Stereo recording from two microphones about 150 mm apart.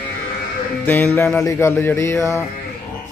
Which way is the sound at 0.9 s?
10° left (ahead or behind).